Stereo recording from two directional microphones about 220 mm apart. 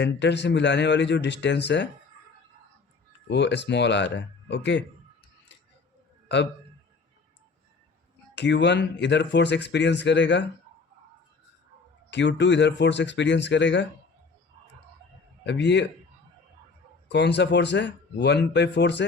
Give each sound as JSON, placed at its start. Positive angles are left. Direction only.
{"t": 0.0, "sound": "speech", "side_deg": 55}
{"t": 3.2, "sound": "speech", "side_deg": 55}
{"t": 6.2, "sound": "a man's voice", "side_deg": 50}
{"t": 8.4, "sound": "speech", "side_deg": 50}
{"t": 12.1, "sound": "speech", "side_deg": 55}
{"t": 15.4, "sound": "speech", "side_deg": 50}
{"t": 17.1, "sound": "speech", "side_deg": 50}